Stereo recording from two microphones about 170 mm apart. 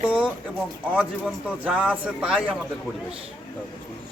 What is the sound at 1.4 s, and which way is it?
A man's voice, 5° right (ahead or behind).